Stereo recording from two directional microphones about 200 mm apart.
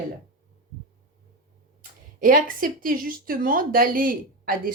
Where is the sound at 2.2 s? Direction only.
45° right (ahead or behind).